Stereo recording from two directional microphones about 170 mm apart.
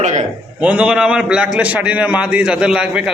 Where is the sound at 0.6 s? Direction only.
5° right (ahead or behind).